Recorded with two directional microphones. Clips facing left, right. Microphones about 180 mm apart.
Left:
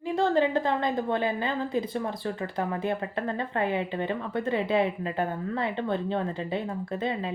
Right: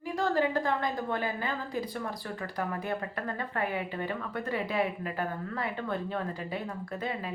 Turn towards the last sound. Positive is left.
turn(degrees=25)  # may be behind; listen again after turning